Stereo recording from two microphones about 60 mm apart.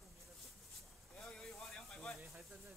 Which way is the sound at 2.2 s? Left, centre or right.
Centre.